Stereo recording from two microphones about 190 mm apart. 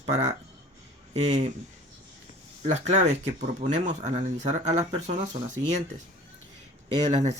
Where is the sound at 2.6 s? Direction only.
35° right (ahead or behind).